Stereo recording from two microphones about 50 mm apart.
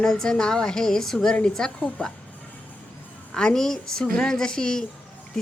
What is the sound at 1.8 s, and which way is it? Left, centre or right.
Speech, left.